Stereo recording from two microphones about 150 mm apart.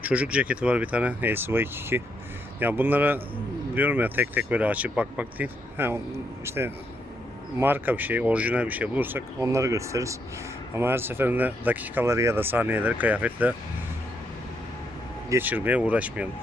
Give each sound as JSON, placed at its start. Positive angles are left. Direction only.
{"t": 0.0, "sound": "speech", "side_deg": -10}
{"t": 15.3, "sound": "speech", "side_deg": -10}